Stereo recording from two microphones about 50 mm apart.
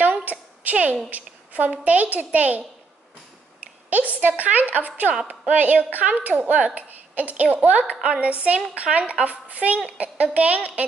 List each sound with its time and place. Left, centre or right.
0.0 s a sound: right
1.1 s a woman's voice: right
3.9 s a woman's voice: right